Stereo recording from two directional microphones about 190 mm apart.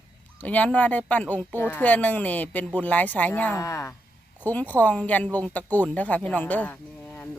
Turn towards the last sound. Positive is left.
turn(degrees=10)  # may be behind; listen again after turning